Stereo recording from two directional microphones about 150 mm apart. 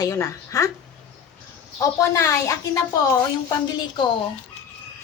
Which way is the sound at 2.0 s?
20° left (ahead or behind).